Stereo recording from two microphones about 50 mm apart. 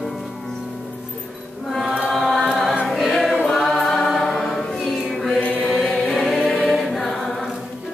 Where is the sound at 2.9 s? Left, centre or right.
Centre.